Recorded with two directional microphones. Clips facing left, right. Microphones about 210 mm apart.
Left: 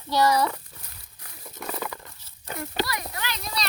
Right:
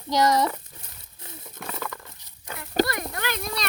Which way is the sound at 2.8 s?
50° right (ahead or behind).